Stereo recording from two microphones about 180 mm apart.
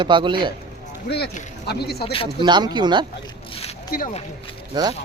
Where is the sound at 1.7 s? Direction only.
65° left (ahead or behind).